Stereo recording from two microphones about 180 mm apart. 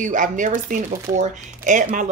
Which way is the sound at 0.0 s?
45° right (ahead or behind).